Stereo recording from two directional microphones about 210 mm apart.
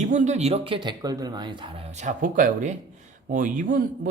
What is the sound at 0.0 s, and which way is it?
Speech, 35° right (ahead or behind).